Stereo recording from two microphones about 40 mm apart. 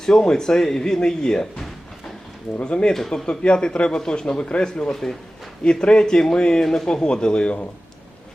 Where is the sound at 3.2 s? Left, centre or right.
Left.